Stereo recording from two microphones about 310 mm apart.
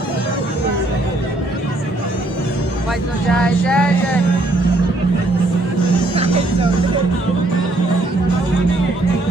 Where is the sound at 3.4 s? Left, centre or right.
Centre.